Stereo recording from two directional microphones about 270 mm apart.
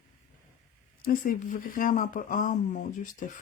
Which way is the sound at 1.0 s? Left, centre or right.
Left.